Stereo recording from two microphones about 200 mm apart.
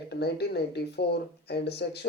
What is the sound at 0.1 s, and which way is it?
Speech, 55° left (ahead or behind).